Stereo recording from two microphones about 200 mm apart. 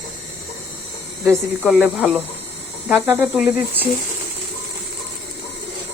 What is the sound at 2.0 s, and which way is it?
Speech, centre (ahead or behind).